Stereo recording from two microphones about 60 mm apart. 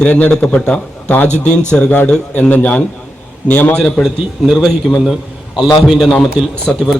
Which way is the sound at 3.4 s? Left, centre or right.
Left.